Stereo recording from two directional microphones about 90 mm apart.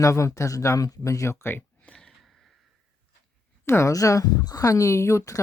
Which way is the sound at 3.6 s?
30° left (ahead or behind).